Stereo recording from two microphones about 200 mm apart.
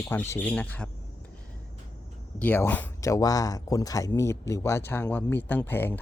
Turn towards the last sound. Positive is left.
turn(degrees=10)  # may be behind; listen again after turning